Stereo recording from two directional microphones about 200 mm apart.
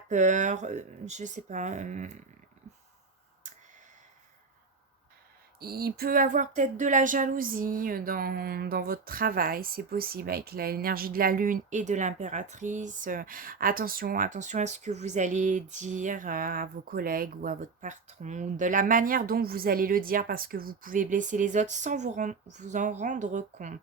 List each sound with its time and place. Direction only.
0.1 s speech: 35° right (ahead or behind)
3.4 s a sound: 40° right (ahead or behind)
5.5 s speech: 50° right (ahead or behind)